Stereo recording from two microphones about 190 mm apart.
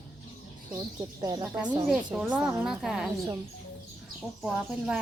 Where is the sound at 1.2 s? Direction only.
20° right (ahead or behind).